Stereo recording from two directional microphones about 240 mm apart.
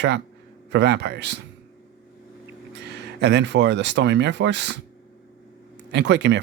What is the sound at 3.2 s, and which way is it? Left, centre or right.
Speech, right.